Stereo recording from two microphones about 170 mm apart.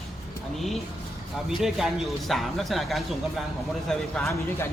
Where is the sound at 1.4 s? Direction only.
Centre (ahead or behind).